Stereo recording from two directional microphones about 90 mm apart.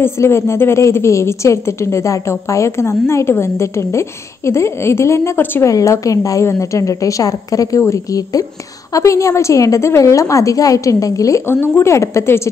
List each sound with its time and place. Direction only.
0.0 s a woman's voice: 30° left (ahead or behind)
5.7 s a woman's voice: 40° left (ahead or behind)